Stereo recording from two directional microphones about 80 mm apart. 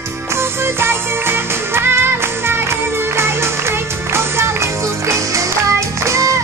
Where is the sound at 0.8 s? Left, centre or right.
Right.